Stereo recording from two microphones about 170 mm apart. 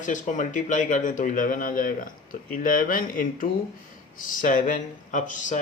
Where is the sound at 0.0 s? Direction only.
45° left (ahead or behind).